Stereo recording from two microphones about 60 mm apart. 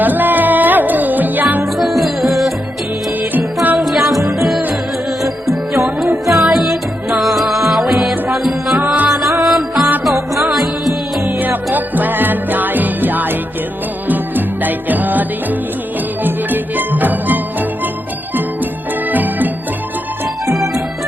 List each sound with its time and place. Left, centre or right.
0.0 s music: right
1.8 s music: centre
3.3 s music: right
3.8 s music: centre
4.2 s music: right
5.2 s music: centre
11.3 s music: right
19.1 s music: right